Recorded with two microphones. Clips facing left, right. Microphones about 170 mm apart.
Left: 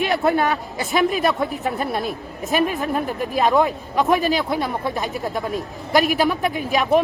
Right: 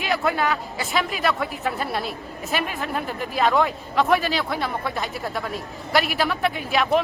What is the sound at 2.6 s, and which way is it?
Speech, 40° left (ahead or behind).